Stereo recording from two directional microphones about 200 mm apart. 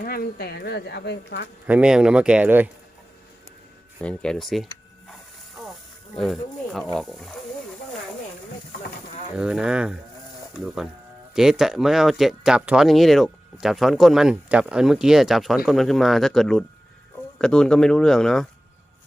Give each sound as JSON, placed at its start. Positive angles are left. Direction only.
{"t": 0.0, "sound": "speech", "side_deg": 45}
{"t": 1.6, "sound": "speech", "side_deg": -5}
{"t": 4.0, "sound": "speech", "side_deg": 5}
{"t": 6.1, "sound": "speech", "side_deg": 0}
{"t": 9.4, "sound": "speech", "side_deg": -5}